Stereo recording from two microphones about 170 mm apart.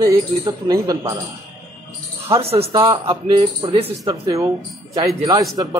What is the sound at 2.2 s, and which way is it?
Speech, 35° right (ahead or behind).